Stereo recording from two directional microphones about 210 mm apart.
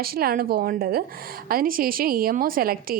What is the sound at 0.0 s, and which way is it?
A woman's voice, 45° right (ahead or behind).